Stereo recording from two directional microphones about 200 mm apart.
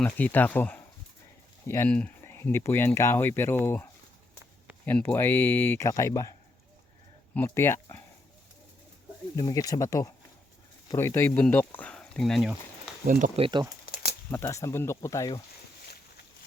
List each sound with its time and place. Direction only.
0.2 s speech: 10° left (ahead or behind)
4.9 s speech: 10° left (ahead or behind)
7.3 s speech: 10° left (ahead or behind)
9.3 s speech: 20° left (ahead or behind); by 12.5 s centre (ahead or behind)
13.1 s speech: 40° right (ahead or behind)
13.4 s speech: 20° right (ahead or behind)
13.8 s crumpling: 50° left (ahead or behind)
14.3 s speech: 15° left (ahead or behind)